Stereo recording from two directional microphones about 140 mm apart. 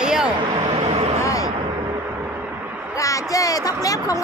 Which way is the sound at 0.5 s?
45° right (ahead or behind).